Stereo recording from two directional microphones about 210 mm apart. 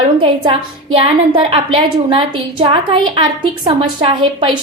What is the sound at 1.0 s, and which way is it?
A woman's voice, 25° right (ahead or behind).